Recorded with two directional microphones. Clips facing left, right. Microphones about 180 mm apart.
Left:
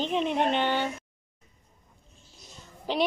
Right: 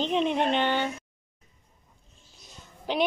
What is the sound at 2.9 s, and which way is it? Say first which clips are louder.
Speech: even; centre (ahead or behind).